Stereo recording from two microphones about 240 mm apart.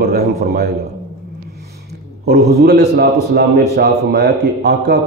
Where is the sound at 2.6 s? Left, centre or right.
Right.